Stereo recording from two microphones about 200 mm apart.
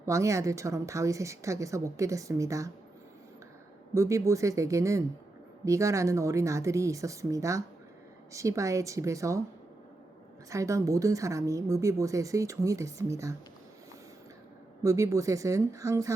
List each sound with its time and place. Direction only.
0.0 s speech: 15° right (ahead or behind)
3.9 s speech: 15° right (ahead or behind)
10.5 s speech: 15° right (ahead or behind)
14.8 s speech: 15° right (ahead or behind)